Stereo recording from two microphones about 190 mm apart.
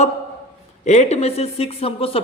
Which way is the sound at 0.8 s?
35° left (ahead or behind).